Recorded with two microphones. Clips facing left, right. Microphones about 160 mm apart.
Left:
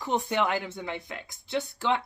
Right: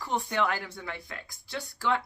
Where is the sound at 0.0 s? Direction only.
20° left (ahead or behind).